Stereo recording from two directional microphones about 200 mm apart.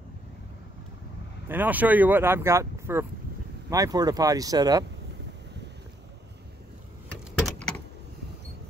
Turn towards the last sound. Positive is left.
turn(degrees=5)  # may be behind; listen again after turning